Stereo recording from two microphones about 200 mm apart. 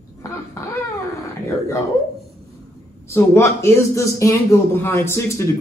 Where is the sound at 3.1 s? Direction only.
15° left (ahead or behind).